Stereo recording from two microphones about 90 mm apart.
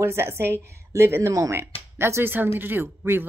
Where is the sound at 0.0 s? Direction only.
30° right (ahead or behind).